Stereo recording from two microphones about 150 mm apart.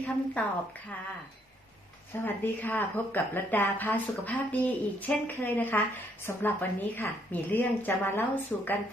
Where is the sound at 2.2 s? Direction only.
15° left (ahead or behind).